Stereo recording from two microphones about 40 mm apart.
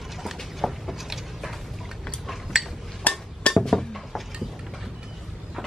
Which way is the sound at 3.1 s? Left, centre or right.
Left.